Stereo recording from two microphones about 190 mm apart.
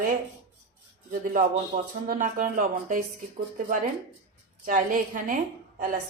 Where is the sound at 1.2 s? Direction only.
45° right (ahead or behind).